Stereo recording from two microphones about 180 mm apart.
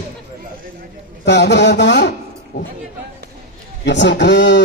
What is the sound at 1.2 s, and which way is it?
Mantra, 70° left (ahead or behind).